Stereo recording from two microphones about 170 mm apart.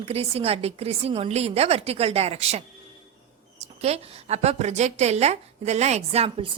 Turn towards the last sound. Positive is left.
turn(degrees=-35)  # may be behind; listen again after turning